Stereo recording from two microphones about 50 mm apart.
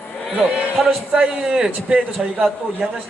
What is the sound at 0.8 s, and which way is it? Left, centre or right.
Speech, centre.